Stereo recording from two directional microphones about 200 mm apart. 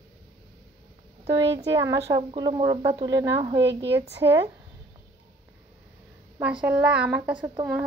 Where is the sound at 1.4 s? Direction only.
15° right (ahead or behind).